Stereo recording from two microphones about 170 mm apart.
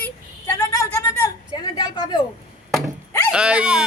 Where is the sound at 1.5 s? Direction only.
25° left (ahead or behind).